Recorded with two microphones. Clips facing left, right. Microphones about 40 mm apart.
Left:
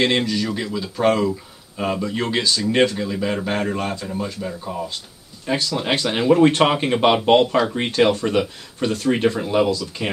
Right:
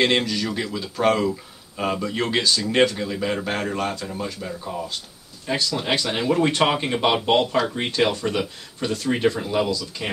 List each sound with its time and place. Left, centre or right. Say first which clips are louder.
0.0 s speech: left 1 dB; centre
8.1 s speech: left 5 dB; left